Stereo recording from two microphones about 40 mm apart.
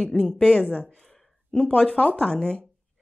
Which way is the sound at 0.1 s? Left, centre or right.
Left.